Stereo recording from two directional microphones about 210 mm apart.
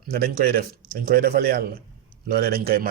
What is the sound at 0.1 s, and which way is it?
A man's voice, 45° right (ahead or behind).